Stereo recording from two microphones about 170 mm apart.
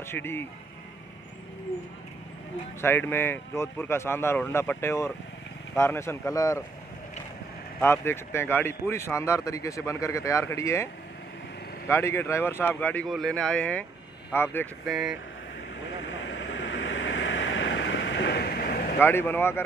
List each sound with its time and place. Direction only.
0.1 s speech: 15° left (ahead or behind)
2.8 s speech: 15° left (ahead or behind)
7.8 s speech: 15° left (ahead or behind)
11.9 s speech: 15° left (ahead or behind)
14.9 s speech: centre (ahead or behind)
16.1 s vehicle: 90° left; by 18.9 s 60° left (ahead or behind)
18.9 s speech: 10° left (ahead or behind)